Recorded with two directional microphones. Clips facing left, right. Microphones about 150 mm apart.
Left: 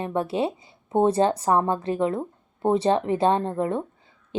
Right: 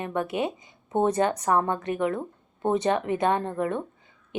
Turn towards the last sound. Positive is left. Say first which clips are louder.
# left 2 dB
turn(degrees=25)  # may be behind; listen again after turning